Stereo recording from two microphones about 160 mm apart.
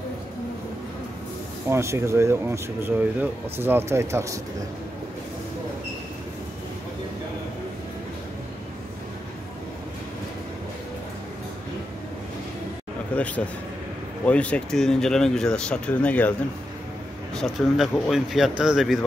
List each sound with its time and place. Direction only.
1.7 s speech: 15° right (ahead or behind)
13.1 s a sound: 10° left (ahead or behind)
14.2 s speech: 10° left (ahead or behind)
17.4 s speech: centre (ahead or behind)